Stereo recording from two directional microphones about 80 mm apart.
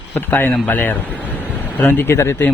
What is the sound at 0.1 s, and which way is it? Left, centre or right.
Speech, left.